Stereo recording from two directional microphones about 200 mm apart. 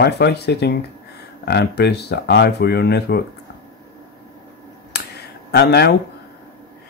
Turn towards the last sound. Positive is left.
turn(degrees=55)  # may be behind; listen again after turning